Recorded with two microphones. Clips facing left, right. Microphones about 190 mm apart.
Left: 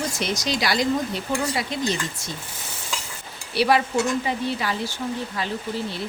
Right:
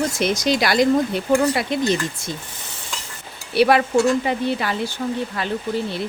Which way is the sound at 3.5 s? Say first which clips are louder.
Right 5 dB; 55° right (ahead or behind).